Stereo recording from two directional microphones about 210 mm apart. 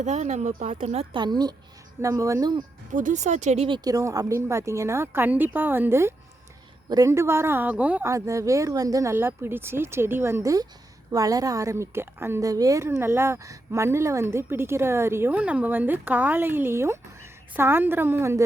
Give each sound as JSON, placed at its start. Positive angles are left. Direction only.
{"t": 0.0, "sound": "a woman's voice", "side_deg": -35}
{"t": 2.9, "sound": "a woman's voice", "side_deg": -35}
{"t": 3.8, "sound": "a woman's voice", "side_deg": -15}